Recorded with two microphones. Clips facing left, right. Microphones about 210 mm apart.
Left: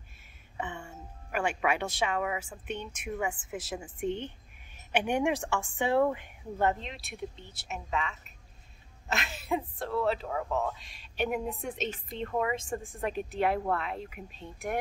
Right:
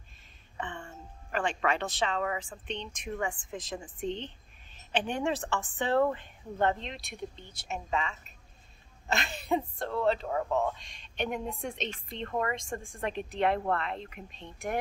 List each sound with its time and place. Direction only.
0.6 s speech: 10° left (ahead or behind)